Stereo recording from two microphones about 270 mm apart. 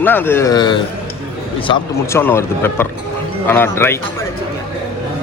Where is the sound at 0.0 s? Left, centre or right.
Centre.